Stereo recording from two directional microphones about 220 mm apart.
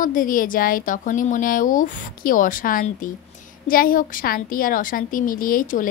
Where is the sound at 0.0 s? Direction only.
40° left (ahead or behind).